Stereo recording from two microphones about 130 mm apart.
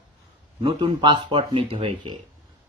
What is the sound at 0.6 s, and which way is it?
Speech, 40° right (ahead or behind).